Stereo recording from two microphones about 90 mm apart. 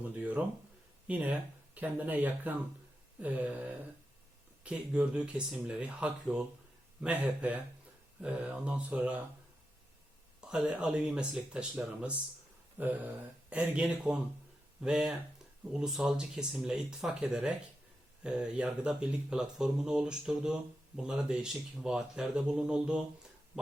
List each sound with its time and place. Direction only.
0.2 s speech: 15° right (ahead or behind)
10.4 s speech: 10° right (ahead or behind)